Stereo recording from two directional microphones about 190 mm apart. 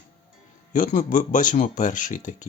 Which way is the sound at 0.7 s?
45° left (ahead or behind).